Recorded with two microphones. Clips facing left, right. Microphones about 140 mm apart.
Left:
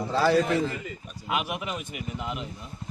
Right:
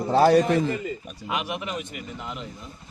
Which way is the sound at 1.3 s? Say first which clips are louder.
Even; 5° left (ahead or behind).